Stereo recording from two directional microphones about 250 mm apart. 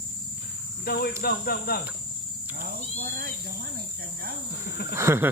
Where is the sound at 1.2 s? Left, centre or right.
Left.